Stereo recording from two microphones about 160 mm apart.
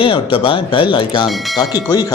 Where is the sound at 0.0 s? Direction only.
35° left (ahead or behind).